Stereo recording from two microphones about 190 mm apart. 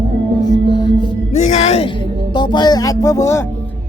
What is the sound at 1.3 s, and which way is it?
Music, 35° left (ahead or behind).